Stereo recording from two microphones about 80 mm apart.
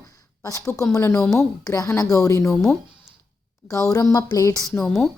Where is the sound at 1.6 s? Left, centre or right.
Left.